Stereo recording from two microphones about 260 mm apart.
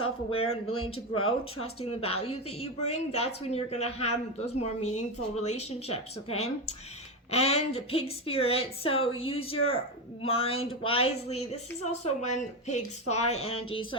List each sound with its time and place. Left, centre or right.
0.0 s speech: left
0.4 s speech: left
1.6 s a woman's voice: left